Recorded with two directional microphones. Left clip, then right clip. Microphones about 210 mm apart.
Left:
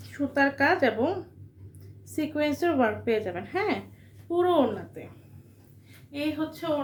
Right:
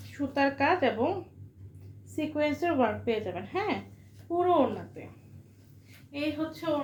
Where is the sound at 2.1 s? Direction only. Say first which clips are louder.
Left 2 dB; 20° left (ahead or behind).